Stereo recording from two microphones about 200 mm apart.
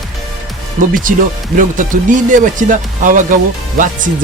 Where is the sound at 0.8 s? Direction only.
40° right (ahead or behind).